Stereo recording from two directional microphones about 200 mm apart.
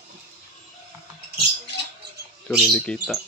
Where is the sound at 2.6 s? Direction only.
5° left (ahead or behind).